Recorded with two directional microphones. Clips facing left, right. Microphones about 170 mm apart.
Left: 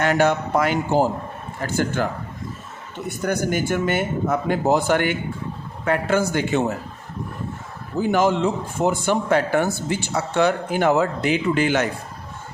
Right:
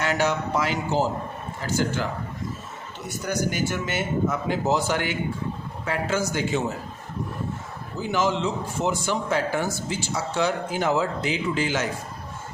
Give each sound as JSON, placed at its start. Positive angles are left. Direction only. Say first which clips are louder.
{"t": 0.0, "sound": "a man's voice", "louder": "left 5 dB", "side_deg": 55}
{"t": 3.2, "sound": "a man's voice", "louder": "left 4 dB", "side_deg": 55}
{"t": 7.9, "sound": "a man's voice", "louder": "left 6 dB", "side_deg": 55}